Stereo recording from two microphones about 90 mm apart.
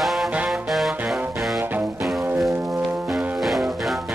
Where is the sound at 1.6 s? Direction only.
20° right (ahead or behind).